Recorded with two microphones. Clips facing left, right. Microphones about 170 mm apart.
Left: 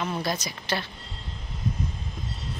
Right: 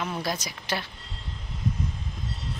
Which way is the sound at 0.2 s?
10° right (ahead or behind).